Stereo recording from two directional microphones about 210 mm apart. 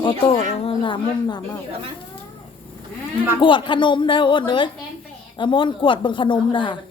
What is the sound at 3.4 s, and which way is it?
Speech, 25° left (ahead or behind).